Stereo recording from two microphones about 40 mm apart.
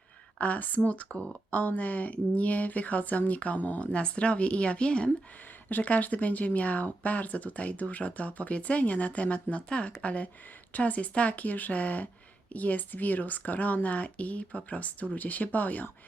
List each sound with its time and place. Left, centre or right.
0.3 s speech: left
1.1 s speech: left
1.5 s speech: left
3.9 s speech: left
5.6 s speech: left